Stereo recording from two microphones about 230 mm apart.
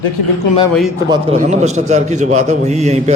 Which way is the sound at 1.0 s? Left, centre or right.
Centre.